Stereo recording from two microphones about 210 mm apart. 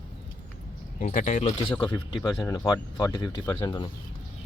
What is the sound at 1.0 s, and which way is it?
Speech, 40° left (ahead or behind).